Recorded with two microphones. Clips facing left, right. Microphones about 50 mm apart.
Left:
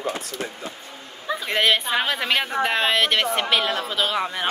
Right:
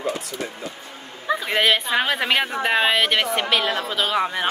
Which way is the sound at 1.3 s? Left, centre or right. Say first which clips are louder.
Right 4 dB; centre.